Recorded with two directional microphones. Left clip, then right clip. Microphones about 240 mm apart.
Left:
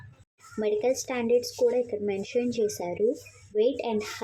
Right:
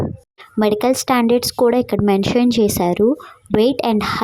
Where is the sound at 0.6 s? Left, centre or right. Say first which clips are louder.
Right 10 dB; right.